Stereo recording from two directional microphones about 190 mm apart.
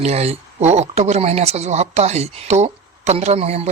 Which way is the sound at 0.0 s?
35° right (ahead or behind).